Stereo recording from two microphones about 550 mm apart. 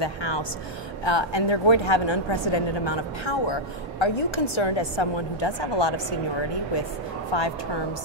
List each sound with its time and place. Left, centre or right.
0.0 s a woman's voice: left
7.3 s a woman's voice: left